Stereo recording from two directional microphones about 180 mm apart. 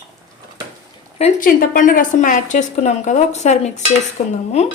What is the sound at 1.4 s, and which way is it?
A woman's voice, 50° left (ahead or behind).